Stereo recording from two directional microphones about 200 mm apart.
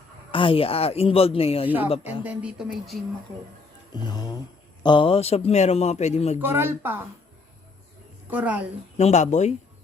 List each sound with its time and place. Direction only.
0.3 s speech: 25° left (ahead or behind)
2.2 s speech: 5° right (ahead or behind)
3.9 s a man's voice: 20° left (ahead or behind)
6.4 s speech: 10° right (ahead or behind)
8.3 s speech: 10° right (ahead or behind)
9.0 s a man's voice: 35° left (ahead or behind)